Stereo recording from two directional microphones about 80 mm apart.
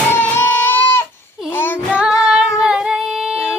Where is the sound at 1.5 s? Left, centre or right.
Left.